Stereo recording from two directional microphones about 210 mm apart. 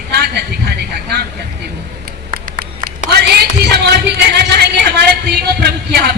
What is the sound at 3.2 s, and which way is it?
Speech, 50° right (ahead or behind).